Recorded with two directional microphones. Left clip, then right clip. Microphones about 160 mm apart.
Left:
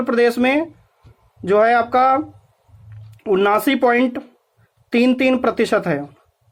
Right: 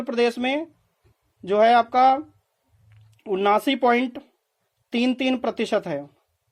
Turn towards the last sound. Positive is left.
turn(degrees=-25)  # may be behind; listen again after turning